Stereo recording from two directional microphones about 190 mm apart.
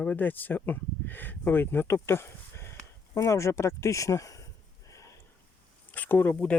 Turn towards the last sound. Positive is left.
turn(degrees=5)  # may be behind; listen again after turning